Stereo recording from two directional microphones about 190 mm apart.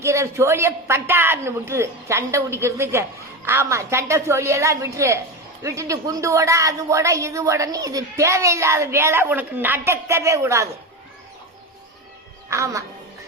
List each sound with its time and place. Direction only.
0.0 s a woman's voice: 15° right (ahead or behind)
12.5 s a woman's voice: 15° right (ahead or behind)